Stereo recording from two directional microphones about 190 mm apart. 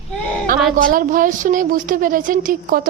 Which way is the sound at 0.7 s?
45° right (ahead or behind).